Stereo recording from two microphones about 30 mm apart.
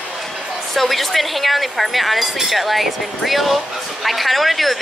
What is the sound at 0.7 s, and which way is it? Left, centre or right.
Speech, centre.